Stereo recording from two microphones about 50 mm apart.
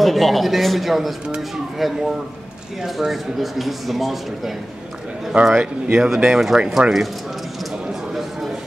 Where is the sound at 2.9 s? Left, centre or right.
Centre.